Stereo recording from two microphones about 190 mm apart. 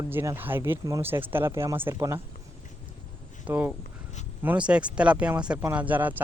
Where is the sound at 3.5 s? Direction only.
10° right (ahead or behind).